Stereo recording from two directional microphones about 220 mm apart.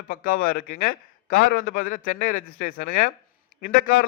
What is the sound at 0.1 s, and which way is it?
A man's voice, 40° left (ahead or behind).